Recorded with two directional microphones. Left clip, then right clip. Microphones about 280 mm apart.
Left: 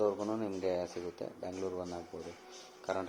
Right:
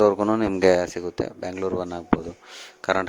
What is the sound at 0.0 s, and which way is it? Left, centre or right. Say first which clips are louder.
Speech: right 14 dB; right.